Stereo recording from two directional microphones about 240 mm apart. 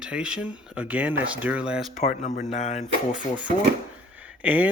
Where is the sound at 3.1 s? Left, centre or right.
Centre.